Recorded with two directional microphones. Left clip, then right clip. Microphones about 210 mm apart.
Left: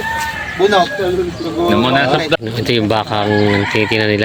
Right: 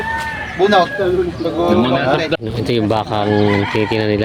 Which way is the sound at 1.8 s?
20° left (ahead or behind).